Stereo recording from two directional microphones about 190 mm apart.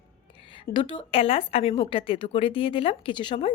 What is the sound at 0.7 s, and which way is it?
A woman's voice, 25° left (ahead or behind).